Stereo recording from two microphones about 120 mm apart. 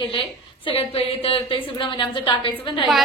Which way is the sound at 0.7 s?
50° left (ahead or behind).